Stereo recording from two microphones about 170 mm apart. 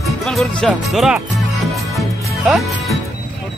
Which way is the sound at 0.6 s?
5° left (ahead or behind).